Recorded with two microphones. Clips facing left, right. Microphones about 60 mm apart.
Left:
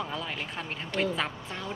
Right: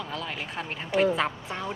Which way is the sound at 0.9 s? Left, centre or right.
Centre.